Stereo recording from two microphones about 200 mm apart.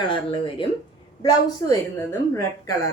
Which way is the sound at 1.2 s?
15° left (ahead or behind).